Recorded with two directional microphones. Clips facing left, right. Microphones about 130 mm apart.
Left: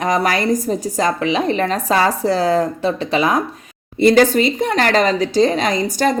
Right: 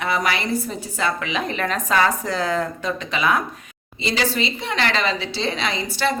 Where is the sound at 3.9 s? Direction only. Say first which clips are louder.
Left 12 dB; 50° left (ahead or behind).